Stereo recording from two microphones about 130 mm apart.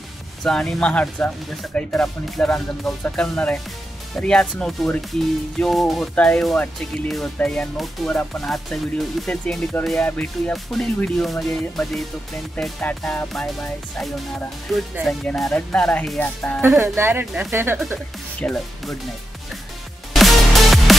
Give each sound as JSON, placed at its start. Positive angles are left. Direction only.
{"t": 0.4, "sound": "speech", "side_deg": 5}
{"t": 15.0, "sound": "speech", "side_deg": 0}
{"t": 16.8, "sound": "speech", "side_deg": -20}
{"t": 18.4, "sound": "speech", "side_deg": 10}
{"t": 20.1, "sound": "music", "side_deg": 0}